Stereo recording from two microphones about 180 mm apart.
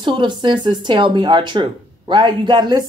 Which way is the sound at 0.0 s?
25° right (ahead or behind).